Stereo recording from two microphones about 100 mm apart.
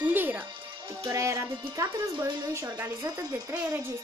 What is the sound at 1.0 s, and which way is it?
A woman's voice, 30° right (ahead or behind).